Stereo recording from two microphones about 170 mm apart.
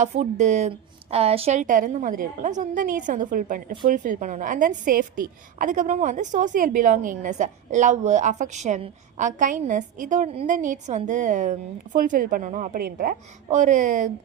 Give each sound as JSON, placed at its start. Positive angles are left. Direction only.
{"t": 0.0, "sound": "a woman's voice", "side_deg": -45}